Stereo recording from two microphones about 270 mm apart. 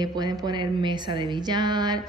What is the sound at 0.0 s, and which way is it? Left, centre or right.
Mantra, centre.